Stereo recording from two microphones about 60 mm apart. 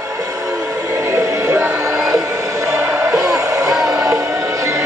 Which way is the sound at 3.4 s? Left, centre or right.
Right.